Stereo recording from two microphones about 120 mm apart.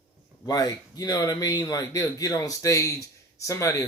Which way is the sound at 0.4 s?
30° left (ahead or behind).